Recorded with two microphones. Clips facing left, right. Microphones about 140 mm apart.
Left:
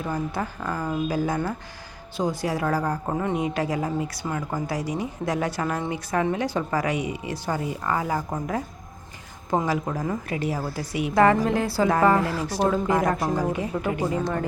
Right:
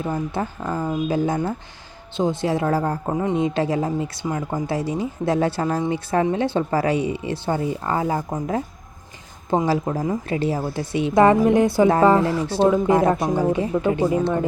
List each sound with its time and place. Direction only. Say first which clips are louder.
0.0 s speech: right 3 dB; 25° right (ahead or behind)
9.5 s speech: right 4 dB; 30° right (ahead or behind)
12.6 s speech: right 5 dB; 15° right (ahead or behind)